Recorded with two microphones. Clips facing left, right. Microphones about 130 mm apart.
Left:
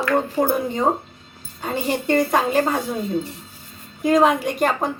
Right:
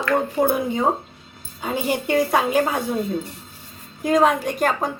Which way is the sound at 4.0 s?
Centre (ahead or behind).